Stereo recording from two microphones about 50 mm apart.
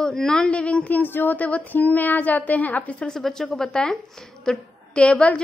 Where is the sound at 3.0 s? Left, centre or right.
Centre.